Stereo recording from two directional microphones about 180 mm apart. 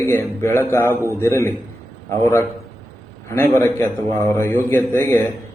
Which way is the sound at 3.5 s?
15° left (ahead or behind).